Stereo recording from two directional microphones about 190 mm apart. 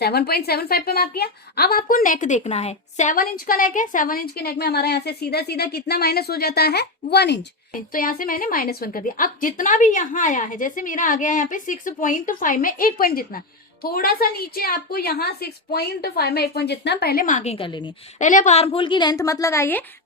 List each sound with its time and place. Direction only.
0.0 s a woman's voice: 55° left (ahead or behind); by 17.9 s 25° left (ahead or behind)
18.2 s a woman's voice: 40° left (ahead or behind); by 19.8 s 15° left (ahead or behind)